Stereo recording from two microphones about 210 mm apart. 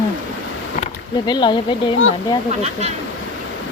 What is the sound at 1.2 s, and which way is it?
Speech, 20° left (ahead or behind).